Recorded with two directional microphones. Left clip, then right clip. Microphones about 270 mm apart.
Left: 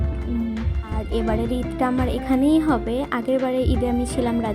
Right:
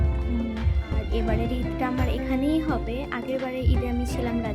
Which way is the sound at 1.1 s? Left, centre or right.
Centre.